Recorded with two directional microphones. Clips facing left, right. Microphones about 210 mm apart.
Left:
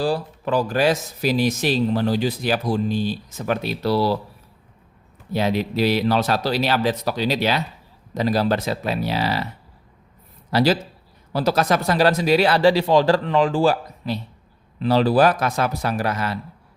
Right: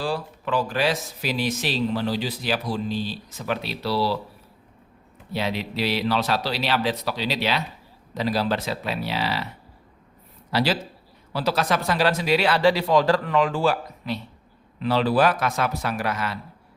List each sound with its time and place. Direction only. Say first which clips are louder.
0.0 s speech: left 5 dB; 40° left (ahead or behind)
5.3 s speech: left 6 dB; 45° left (ahead or behind)
10.5 s speech: left 5 dB; 45° left (ahead or behind)